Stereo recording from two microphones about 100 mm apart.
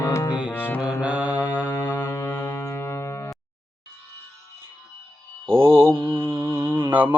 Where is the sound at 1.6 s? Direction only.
35° left (ahead or behind).